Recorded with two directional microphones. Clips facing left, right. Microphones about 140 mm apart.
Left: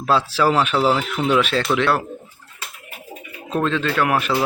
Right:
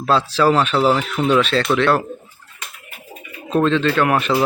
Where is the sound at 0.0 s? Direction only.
10° left (ahead or behind).